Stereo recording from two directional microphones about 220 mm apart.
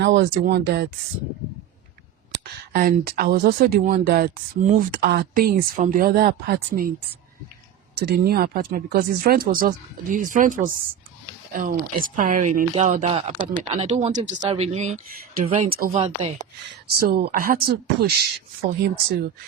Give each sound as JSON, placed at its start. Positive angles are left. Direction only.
{"t": 0.0, "sound": "speech", "side_deg": -55}
{"t": 2.4, "sound": "speech", "side_deg": -45}
{"t": 7.9, "sound": "speech", "side_deg": -45}
{"t": 17.1, "sound": "speech", "side_deg": -45}